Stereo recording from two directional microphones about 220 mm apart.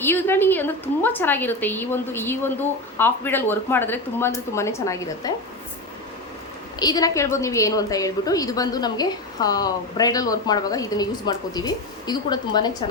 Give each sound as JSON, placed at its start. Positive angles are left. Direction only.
{"t": 0.0, "sound": "a woman's voice", "side_deg": 10}
{"t": 6.7, "sound": "a woman's voice", "side_deg": 15}